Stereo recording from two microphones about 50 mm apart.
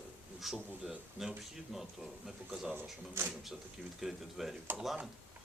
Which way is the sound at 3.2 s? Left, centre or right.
Right.